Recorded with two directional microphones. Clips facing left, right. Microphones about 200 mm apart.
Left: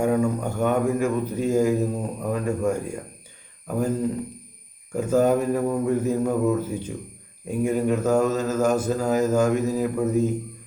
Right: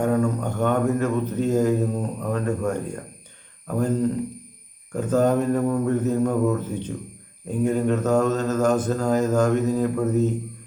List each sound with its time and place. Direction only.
0.0 s speech: 10° left (ahead or behind)